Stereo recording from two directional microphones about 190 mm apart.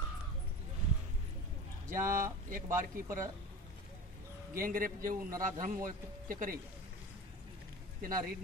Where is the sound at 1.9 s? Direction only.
15° right (ahead or behind).